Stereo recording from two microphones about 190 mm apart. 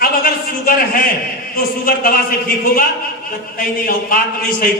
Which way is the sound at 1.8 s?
50° left (ahead or behind).